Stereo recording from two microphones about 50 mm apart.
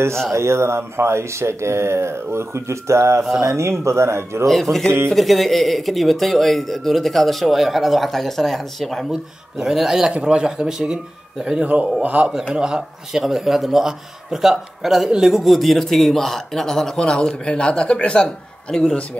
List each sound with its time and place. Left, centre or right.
0.3 s speech: right
4.5 s speech: centre
9.1 s speech: centre
11.6 s a man's voice: right
12.5 s speech: centre
15.3 s speech: centre
17.0 s a man's voice: centre